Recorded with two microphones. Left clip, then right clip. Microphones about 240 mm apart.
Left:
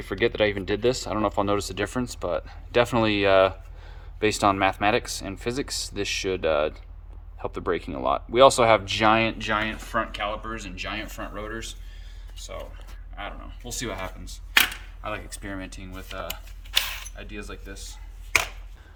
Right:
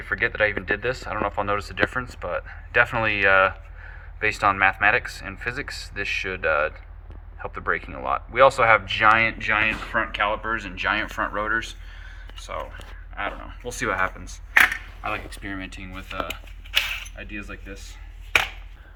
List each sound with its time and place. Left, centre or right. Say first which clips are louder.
0.0 s speech: right 1 dB; left
9.4 s speech: right 5 dB; left
13.1 s speech: right 7 dB; centre
17.2 s speech: right 3 dB; centre